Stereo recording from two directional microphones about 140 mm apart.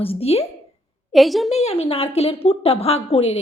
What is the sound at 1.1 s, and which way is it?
Speech, centre (ahead or behind).